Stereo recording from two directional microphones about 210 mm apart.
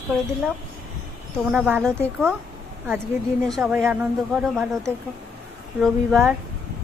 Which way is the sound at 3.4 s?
Centre (ahead or behind).